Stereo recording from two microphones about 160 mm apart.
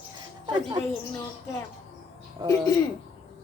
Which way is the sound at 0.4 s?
25° right (ahead or behind).